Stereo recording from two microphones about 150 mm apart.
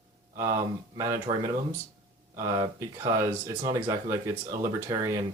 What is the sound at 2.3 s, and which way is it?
Speech, 25° right (ahead or behind).